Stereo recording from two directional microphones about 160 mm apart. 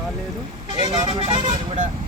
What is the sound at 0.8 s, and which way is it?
Speech, 30° right (ahead or behind).